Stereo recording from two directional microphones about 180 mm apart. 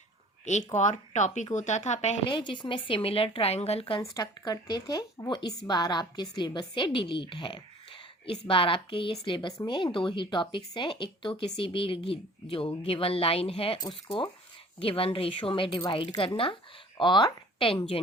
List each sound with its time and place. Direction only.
0.4 s speech: 40° left (ahead or behind)
2.3 s speech: 25° left (ahead or behind)
4.0 s speech: 20° left (ahead or behind)